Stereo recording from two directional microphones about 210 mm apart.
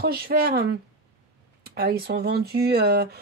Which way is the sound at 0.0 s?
45° right (ahead or behind).